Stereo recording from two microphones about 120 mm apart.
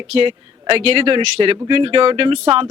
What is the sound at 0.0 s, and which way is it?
Speech, 50° right (ahead or behind).